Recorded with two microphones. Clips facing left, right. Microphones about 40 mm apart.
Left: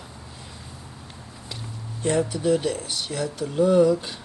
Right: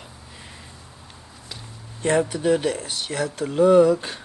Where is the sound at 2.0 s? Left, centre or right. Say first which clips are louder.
Right 2 dB; right.